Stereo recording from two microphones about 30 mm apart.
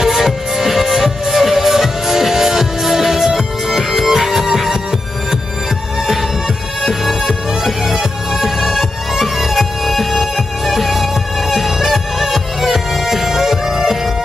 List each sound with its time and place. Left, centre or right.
0.0 s music: centre
6.8 s music: centre